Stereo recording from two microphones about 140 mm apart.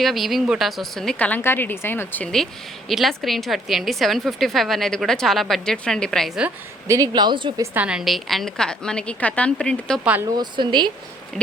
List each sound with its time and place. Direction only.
0.0 s a woman's voice: centre (ahead or behind)
6.8 s a woman's voice: 25° right (ahead or behind)
7.6 s a woman's voice: 15° right (ahead or behind); by 10.0 s 5° left (ahead or behind)
10.0 s speech: 10° right (ahead or behind)
10.3 s a woman's voice: 30° right (ahead or behind)